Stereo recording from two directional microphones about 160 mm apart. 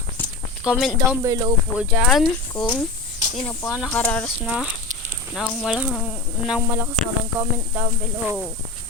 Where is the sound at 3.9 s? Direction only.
10° left (ahead or behind).